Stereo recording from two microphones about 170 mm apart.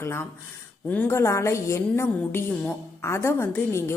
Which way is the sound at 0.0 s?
15° left (ahead or behind).